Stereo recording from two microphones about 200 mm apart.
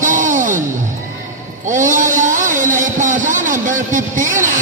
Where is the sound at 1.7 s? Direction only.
40° right (ahead or behind).